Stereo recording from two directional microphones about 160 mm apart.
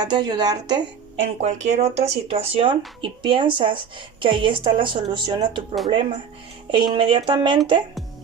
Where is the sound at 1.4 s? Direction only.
45° right (ahead or behind); by 7.5 s 30° right (ahead or behind).